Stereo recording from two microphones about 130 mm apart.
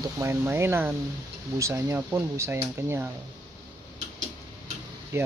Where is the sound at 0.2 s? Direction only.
20° right (ahead or behind).